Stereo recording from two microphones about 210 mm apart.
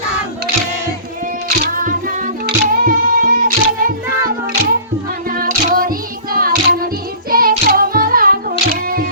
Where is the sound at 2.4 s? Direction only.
45° right (ahead or behind).